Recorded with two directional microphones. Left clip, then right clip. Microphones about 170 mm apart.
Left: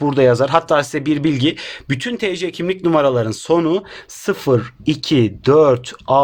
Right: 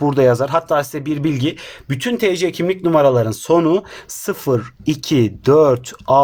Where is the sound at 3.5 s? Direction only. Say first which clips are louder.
Right 2 dB; centre (ahead or behind).